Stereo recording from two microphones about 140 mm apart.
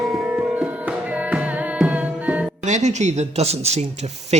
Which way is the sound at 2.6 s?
55° right (ahead or behind).